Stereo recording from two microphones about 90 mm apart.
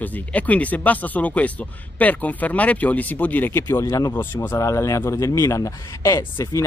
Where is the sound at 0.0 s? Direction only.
15° left (ahead or behind).